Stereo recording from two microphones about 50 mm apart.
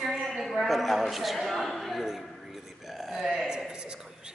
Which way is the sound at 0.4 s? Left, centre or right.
Centre.